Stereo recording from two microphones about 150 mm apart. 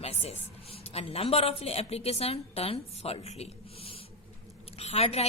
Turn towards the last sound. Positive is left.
turn(degrees=45)  # may be behind; listen again after turning